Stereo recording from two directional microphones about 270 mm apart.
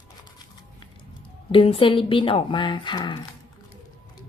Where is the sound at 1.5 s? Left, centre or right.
Centre.